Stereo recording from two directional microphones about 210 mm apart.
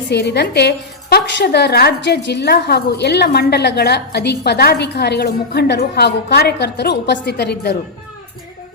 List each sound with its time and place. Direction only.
0.1 s a woman's voice: 55° left (ahead or behind)